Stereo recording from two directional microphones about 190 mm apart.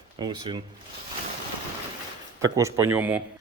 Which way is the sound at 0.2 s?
25° right (ahead or behind).